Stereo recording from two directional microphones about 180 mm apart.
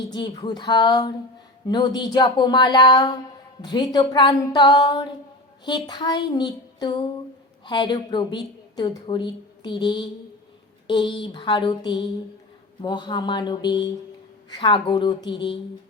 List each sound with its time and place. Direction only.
0.1 s a woman's voice: 25° left (ahead or behind)